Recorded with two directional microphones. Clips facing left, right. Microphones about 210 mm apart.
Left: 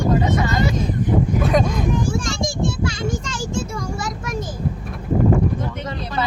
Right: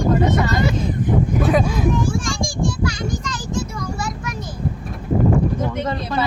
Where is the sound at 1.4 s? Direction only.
5° right (ahead or behind).